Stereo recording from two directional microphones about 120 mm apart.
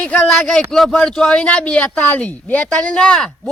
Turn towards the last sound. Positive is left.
turn(degrees=5)  # may be behind; listen again after turning